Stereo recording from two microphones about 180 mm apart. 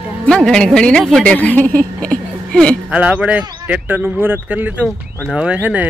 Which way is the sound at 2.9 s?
5° right (ahead or behind).